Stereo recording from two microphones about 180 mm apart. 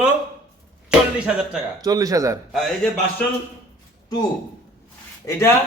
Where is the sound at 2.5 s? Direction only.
Centre (ahead or behind).